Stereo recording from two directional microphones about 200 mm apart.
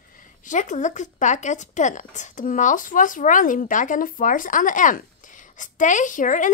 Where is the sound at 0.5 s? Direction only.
40° left (ahead or behind).